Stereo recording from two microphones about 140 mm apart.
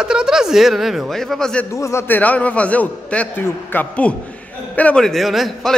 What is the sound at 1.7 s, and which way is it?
A man's voice, 20° left (ahead or behind).